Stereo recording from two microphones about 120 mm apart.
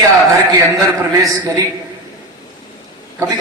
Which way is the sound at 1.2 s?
30° right (ahead or behind).